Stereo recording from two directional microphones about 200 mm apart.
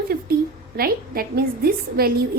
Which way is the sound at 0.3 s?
50° right (ahead or behind).